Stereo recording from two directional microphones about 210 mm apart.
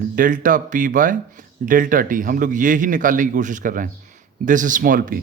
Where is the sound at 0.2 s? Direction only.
40° right (ahead or behind).